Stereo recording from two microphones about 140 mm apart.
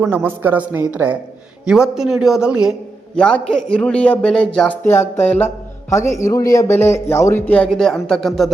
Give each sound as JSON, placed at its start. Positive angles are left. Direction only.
{"t": 0.0, "sound": "a woman's voice", "side_deg": -15}
{"t": 3.2, "sound": "a man's voice", "side_deg": 5}